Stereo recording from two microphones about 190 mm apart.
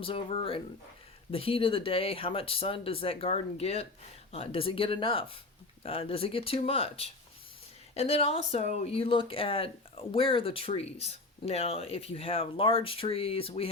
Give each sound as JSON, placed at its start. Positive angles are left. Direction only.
{"t": 0.0, "sound": "speech", "side_deg": 30}